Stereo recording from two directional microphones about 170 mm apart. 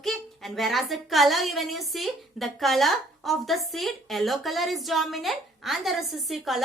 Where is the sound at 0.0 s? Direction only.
Centre (ahead or behind).